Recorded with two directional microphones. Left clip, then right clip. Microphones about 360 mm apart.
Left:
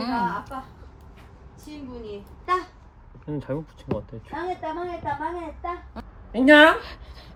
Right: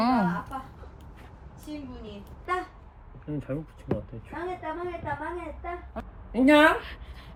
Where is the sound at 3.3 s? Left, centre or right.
Left.